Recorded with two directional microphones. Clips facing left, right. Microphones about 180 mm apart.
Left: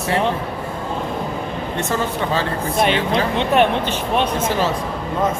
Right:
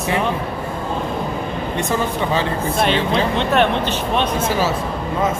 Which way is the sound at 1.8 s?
15° right (ahead or behind).